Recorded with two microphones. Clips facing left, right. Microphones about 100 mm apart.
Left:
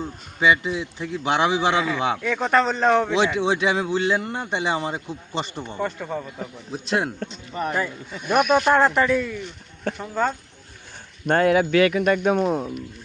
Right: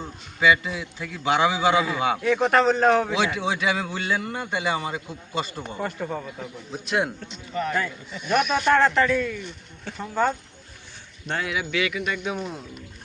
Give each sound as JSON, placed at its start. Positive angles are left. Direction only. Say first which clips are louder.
{"t": 0.3, "sound": "a man's voice", "louder": "left 1 dB", "side_deg": 25}
{"t": 1.8, "sound": "a man's voice", "louder": "even", "side_deg": -10}
{"t": 3.3, "sound": "a man's voice", "louder": "left 4 dB", "side_deg": 25}
{"t": 5.8, "sound": "speech", "louder": "left 2 dB", "side_deg": 0}
{"t": 6.4, "sound": "speech", "louder": "left 2 dB", "side_deg": 30}
{"t": 7.5, "sound": "a man's voice", "louder": "even", "side_deg": 20}
{"t": 8.1, "sound": "speech", "louder": "left 4 dB", "side_deg": 50}
{"t": 8.6, "sound": "speech", "louder": "left 1 dB", "side_deg": 10}
{"t": 11.3, "sound": "speech", "louder": "left 10 dB", "side_deg": 50}